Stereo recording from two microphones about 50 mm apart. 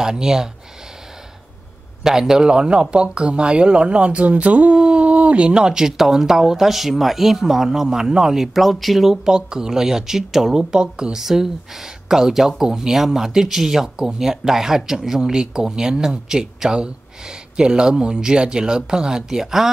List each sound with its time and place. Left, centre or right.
0.0 s speech: centre
2.0 s speech: centre; by 4.7 s right
4.7 s a sound: centre
5.0 s speech: right; by 19.7 s centre